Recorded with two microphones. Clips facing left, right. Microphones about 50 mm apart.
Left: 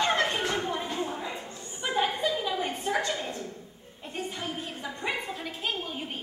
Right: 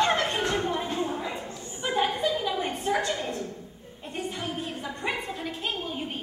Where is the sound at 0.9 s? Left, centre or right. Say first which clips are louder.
Right 3 dB; centre.